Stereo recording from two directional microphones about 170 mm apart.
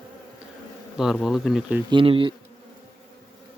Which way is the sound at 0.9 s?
Centre (ahead or behind).